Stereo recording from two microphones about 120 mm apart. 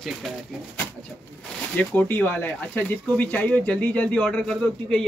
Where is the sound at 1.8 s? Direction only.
15° left (ahead or behind).